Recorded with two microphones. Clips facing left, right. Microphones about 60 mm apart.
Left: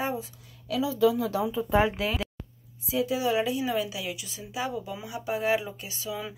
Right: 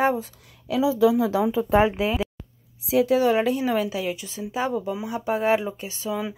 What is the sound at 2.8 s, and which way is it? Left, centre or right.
Speech, right.